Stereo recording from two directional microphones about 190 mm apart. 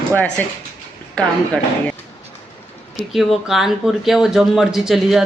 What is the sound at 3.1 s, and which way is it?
Speech, centre (ahead or behind).